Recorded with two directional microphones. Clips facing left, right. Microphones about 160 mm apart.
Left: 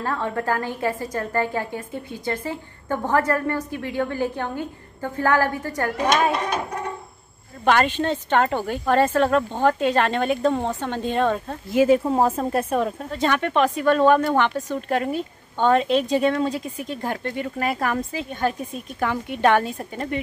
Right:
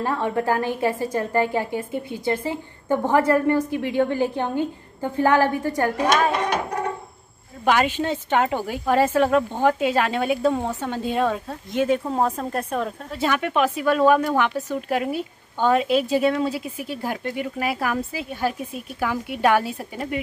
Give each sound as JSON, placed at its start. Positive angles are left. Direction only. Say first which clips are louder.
{"t": 0.0, "sound": "a woman's voice", "louder": "right 2 dB", "side_deg": -15}
{"t": 7.6, "sound": "speech", "louder": "left 1 dB", "side_deg": -10}
{"t": 11.7, "sound": "speech", "louder": "left 4 dB", "side_deg": 5}
{"t": 13.1, "sound": "speech", "louder": "even", "side_deg": -5}